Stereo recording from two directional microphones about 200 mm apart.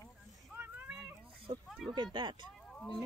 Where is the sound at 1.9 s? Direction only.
20° right (ahead or behind).